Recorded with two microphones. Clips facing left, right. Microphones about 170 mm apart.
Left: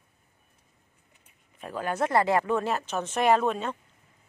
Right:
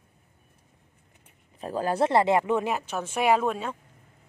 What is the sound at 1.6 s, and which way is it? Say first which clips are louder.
Speech: right 4 dB; 35° right (ahead or behind).